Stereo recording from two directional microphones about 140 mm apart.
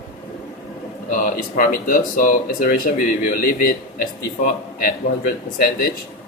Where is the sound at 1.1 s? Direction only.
80° left.